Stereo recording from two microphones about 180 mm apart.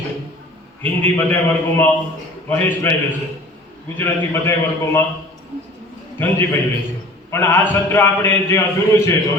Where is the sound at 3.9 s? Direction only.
15° left (ahead or behind).